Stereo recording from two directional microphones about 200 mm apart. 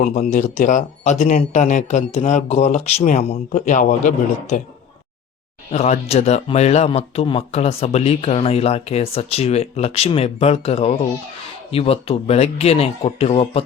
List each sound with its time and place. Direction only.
0.0 s speech: 40° left (ahead or behind)
5.7 s speech: 30° left (ahead or behind)